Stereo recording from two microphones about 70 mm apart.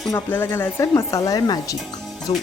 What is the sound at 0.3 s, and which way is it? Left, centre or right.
Speech, left.